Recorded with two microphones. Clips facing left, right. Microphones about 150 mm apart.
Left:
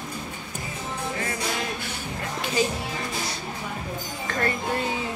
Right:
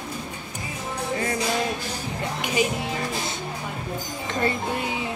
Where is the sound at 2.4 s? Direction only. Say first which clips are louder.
Right 1 dB; 15° right (ahead or behind).